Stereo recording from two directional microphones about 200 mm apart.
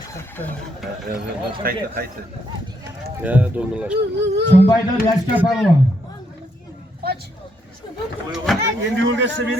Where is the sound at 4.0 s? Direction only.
55° right (ahead or behind).